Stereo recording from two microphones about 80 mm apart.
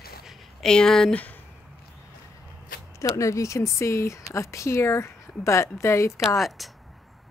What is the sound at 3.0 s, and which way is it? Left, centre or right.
Speech, left.